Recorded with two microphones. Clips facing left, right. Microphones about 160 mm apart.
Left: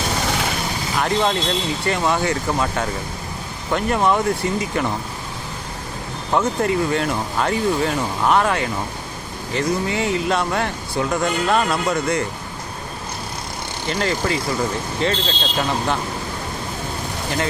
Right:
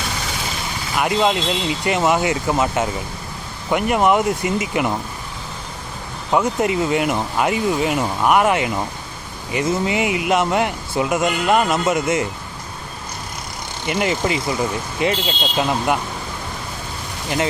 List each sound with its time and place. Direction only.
0.9 s speech: 10° right (ahead or behind)
6.3 s speech: 15° right (ahead or behind)
13.8 s speech: 15° right (ahead or behind)